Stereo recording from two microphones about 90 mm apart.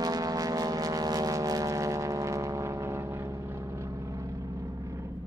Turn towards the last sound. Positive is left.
turn(degrees=-35)  # may be behind; listen again after turning